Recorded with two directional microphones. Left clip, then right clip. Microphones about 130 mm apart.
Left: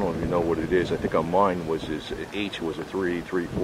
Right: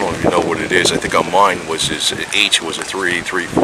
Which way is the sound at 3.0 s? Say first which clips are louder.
Right 11 dB; 20° right (ahead or behind).